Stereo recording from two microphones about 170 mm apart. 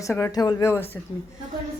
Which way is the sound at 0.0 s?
15° left (ahead or behind).